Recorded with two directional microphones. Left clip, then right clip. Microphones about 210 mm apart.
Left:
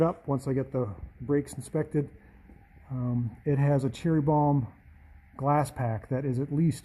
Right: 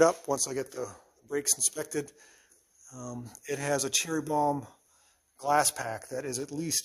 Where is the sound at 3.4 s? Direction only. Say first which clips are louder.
Left 2 dB; 20° right (ahead or behind).